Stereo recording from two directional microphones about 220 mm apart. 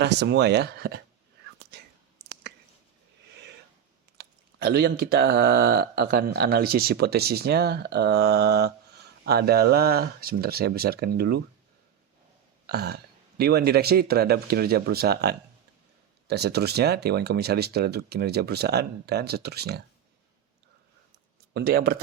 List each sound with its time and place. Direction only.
0.0 s speech: 50° right (ahead or behind)
1.7 s whispering: 50° right (ahead or behind)
4.2 s speech: 45° right (ahead or behind)
12.6 s speech: 45° right (ahead or behind)
21.5 s speech: 40° right (ahead or behind)